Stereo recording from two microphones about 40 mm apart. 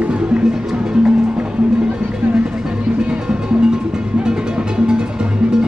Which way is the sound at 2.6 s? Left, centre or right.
Right.